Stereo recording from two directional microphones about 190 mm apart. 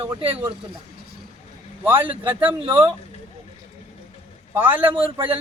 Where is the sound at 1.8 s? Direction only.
10° right (ahead or behind).